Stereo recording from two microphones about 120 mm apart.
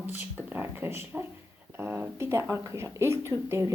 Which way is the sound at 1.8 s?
15° right (ahead or behind).